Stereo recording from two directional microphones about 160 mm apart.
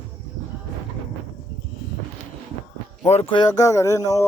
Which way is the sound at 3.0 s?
40° left (ahead or behind).